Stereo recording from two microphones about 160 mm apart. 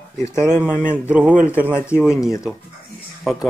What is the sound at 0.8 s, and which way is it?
Speech, 10° right (ahead or behind).